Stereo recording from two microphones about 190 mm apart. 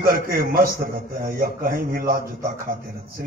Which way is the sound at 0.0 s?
50° right (ahead or behind).